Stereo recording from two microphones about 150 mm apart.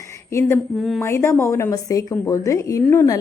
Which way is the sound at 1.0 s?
20° left (ahead or behind).